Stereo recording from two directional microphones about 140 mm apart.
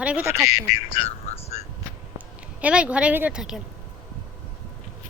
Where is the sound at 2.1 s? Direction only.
10° right (ahead or behind).